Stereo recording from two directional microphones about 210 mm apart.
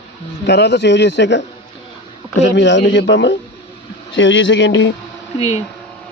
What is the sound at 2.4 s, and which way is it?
A man's voice, 55° left (ahead or behind).